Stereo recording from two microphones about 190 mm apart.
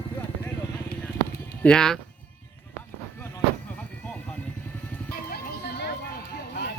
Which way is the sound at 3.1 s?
10° left (ahead or behind).